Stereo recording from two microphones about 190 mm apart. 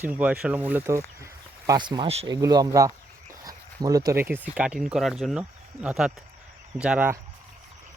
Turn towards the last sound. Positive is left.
turn(degrees=-10)  # may be behind; listen again after turning